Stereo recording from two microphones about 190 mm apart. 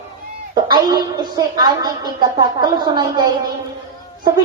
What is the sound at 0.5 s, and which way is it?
Speech, 20° right (ahead or behind).